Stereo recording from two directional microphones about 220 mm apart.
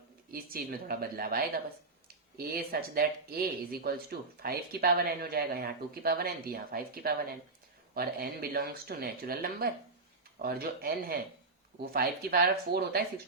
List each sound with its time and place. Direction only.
0.3 s speech: 40° right (ahead or behind)